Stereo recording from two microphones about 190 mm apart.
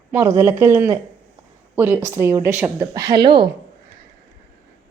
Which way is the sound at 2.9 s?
20° right (ahead or behind).